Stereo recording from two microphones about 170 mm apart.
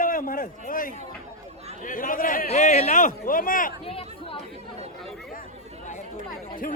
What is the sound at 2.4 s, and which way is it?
Speech, 40° left (ahead or behind).